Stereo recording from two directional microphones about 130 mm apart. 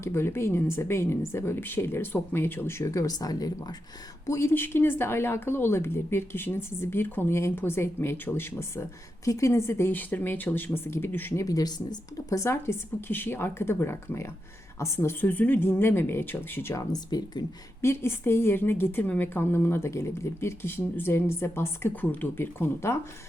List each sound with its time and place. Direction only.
0.0 s a woman's voice: 20° left (ahead or behind)
16.9 s speech: 30° left (ahead or behind)
17.8 s a woman's voice: 20° left (ahead or behind)